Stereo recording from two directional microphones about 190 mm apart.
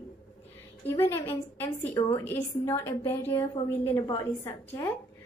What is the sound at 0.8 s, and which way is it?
A woman's voice, 10° left (ahead or behind).